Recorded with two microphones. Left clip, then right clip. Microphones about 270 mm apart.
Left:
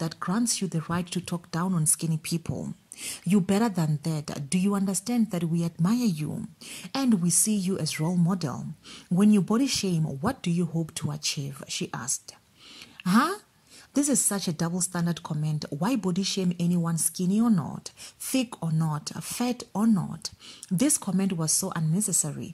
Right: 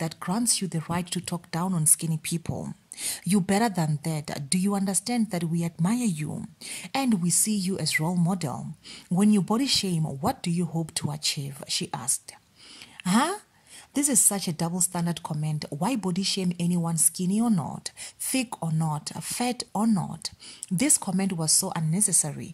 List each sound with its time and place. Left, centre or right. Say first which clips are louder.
0.2 s speech: even; centre
8.0 s speech: even; right
8.3 s speech: right 1 dB; centre